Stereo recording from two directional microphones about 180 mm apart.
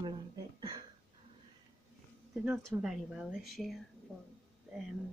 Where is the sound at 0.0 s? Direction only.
25° right (ahead or behind).